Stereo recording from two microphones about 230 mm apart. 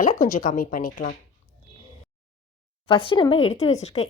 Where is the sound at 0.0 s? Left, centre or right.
Left.